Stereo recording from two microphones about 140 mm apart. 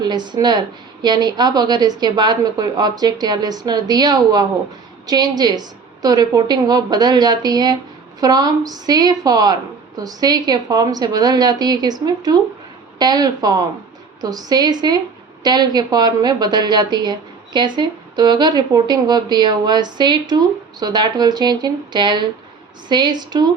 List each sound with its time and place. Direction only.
0.0 s a woman's voice: 30° right (ahead or behind)